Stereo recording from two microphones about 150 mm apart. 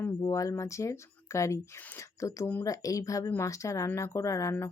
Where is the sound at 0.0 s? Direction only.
20° left (ahead or behind).